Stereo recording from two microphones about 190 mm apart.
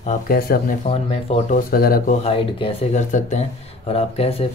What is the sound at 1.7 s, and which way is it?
Speech, 50° left (ahead or behind).